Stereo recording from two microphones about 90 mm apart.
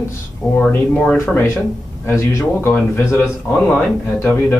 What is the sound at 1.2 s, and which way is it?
Speech, 20° left (ahead or behind).